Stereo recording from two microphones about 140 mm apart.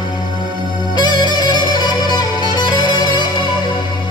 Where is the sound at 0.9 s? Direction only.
30° left (ahead or behind).